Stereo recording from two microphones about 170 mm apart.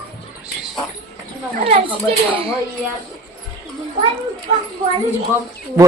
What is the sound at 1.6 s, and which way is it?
Speech, 30° right (ahead or behind).